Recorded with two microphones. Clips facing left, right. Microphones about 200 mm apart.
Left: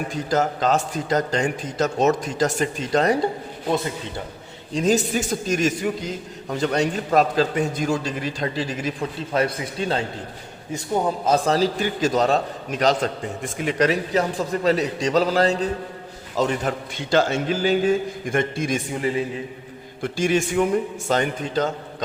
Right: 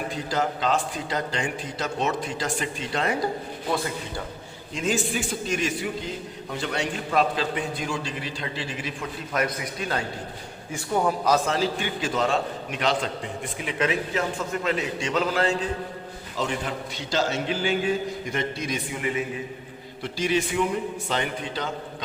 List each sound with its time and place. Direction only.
0.1 s a man's voice: 45° left (ahead or behind)
4.7 s a man's voice: 40° left (ahead or behind); by 11.3 s 20° left (ahead or behind)
11.4 s a man's voice: 40° left (ahead or behind)
20.0 s a man's voice: 50° left (ahead or behind)